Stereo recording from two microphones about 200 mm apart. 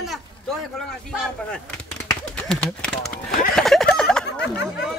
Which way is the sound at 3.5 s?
Centre (ahead or behind).